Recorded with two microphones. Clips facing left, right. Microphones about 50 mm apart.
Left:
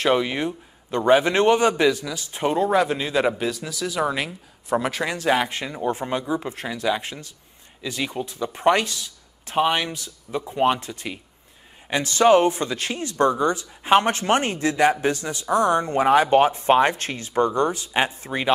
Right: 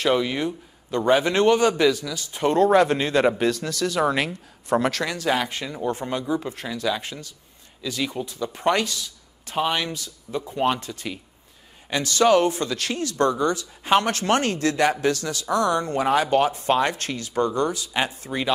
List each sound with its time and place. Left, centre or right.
0.1 s speech: left
2.4 s a man's voice: centre
5.1 s speech: left
9.6 s speech: centre
10.4 s speech: centre